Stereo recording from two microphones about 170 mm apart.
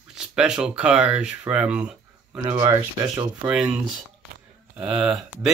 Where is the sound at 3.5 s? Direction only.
5° right (ahead or behind).